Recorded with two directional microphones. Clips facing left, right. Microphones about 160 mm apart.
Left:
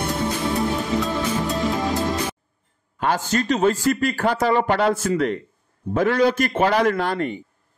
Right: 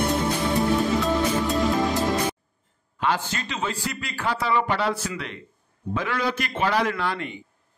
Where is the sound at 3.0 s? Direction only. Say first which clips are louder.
Left 4 dB; 45° left (ahead or behind).